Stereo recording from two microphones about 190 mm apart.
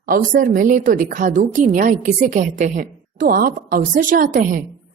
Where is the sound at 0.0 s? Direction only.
45° right (ahead or behind).